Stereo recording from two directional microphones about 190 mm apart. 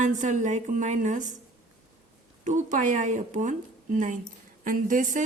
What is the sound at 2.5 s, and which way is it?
Speech, 40° right (ahead or behind).